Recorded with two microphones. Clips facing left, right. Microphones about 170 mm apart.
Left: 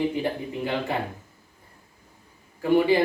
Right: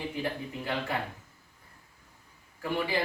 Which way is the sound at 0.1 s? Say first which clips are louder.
Left 6 dB; 25° left (ahead or behind).